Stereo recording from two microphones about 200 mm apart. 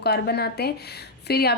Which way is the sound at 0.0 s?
55° left (ahead or behind).